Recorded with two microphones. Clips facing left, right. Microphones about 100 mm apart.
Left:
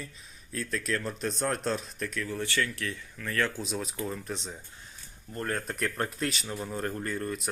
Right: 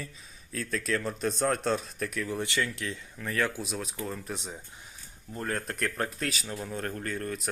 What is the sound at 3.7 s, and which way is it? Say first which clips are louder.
Speech: left 1 dB; centre (ahead or behind).